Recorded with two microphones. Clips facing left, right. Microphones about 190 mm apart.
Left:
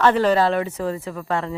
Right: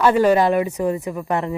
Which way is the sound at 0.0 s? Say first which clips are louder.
Right 2 dB; 10° right (ahead or behind).